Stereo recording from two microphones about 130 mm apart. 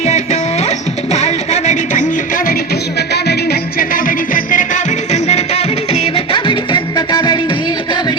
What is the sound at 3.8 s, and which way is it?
Music, 90° left.